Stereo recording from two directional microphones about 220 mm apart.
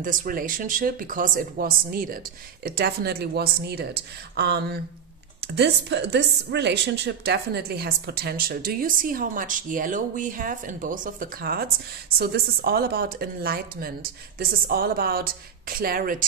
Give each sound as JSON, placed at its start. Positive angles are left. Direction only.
{"t": 0.0, "sound": "a woman's voice", "side_deg": -40}